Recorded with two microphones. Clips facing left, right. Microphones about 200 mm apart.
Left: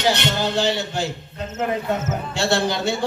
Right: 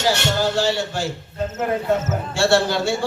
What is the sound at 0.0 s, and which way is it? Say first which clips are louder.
Speech: right 1 dB; 20° left (ahead or behind).